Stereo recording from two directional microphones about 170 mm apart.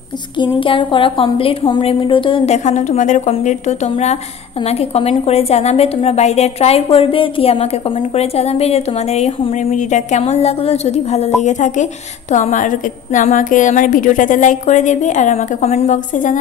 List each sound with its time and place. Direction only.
0.4 s a woman's voice: 30° left (ahead or behind); by 16.3 s 50° left (ahead or behind)